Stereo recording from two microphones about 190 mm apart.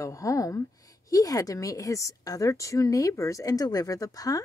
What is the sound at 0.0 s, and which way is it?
Speech, 15° left (ahead or behind).